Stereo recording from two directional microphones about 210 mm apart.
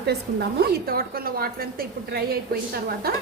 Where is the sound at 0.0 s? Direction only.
50° right (ahead or behind).